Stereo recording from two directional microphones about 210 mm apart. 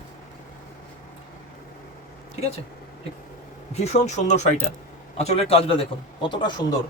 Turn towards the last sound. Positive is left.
turn(degrees=20)  # may be behind; listen again after turning